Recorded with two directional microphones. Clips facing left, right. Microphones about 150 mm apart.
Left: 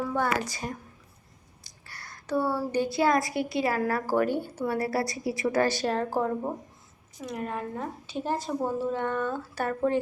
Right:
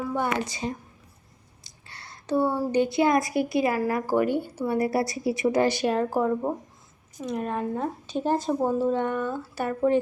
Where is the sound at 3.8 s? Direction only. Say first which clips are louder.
Right 2 dB; 15° right (ahead or behind).